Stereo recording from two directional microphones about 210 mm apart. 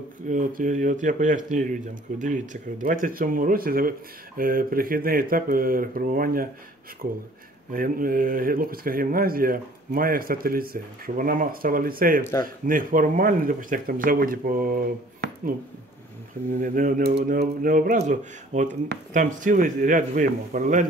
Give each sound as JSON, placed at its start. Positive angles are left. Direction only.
{"t": 0.3, "sound": "speech", "side_deg": -40}
{"t": 7.7, "sound": "speech", "side_deg": -40}
{"t": 12.2, "sound": "a man's voice", "side_deg": 15}
{"t": 12.6, "sound": "speech", "side_deg": -40}
{"t": 16.5, "sound": "speech", "side_deg": -40}